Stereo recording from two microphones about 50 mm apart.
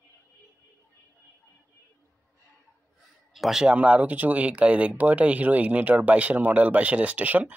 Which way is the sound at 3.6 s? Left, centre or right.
Right.